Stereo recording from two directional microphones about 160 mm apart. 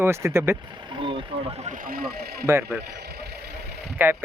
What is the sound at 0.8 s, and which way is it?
Speech, 30° right (ahead or behind).